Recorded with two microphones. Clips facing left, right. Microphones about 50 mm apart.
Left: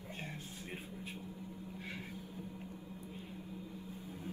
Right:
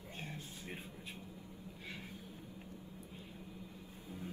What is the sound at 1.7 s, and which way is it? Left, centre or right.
Vehicle, left.